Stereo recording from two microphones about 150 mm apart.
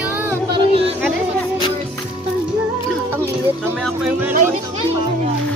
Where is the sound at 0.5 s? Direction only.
35° right (ahead or behind).